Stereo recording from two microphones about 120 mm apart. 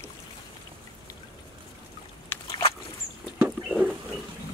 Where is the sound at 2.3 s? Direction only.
15° left (ahead or behind).